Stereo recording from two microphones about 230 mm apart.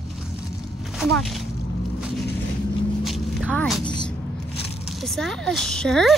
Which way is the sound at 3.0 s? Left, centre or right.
Centre.